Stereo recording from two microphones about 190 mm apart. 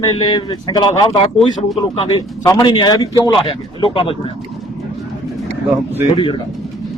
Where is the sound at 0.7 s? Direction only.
20° left (ahead or behind).